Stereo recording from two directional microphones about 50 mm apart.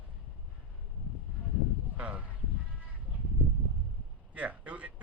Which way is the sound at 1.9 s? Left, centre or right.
Right.